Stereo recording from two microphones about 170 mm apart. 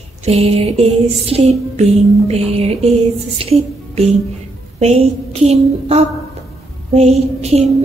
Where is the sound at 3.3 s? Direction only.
35° right (ahead or behind).